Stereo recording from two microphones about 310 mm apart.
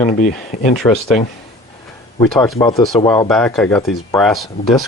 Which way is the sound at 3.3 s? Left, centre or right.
Centre.